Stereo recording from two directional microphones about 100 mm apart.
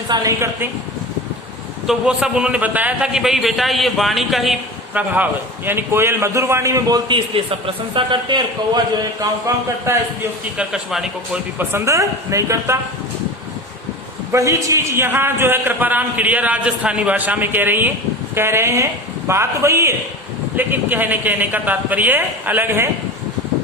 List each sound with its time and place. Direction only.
0.1 s a man's voice: 35° right (ahead or behind)
1.9 s a man's voice: 10° right (ahead or behind)
4.9 s a man's voice: 15° right (ahead or behind); by 7.0 s 35° right (ahead or behind)
7.1 s a man's voice: 65° right (ahead or behind)
9.5 s speech: 40° right (ahead or behind)
9.9 s a man's voice: 30° right (ahead or behind)
10.6 s a man's voice: 5° right (ahead or behind)
11.5 s speech: 30° right (ahead or behind)
14.3 s a man's voice: 30° right (ahead or behind)